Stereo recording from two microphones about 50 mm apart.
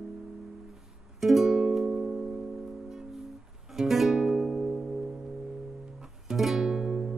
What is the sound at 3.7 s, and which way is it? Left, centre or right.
Music, centre.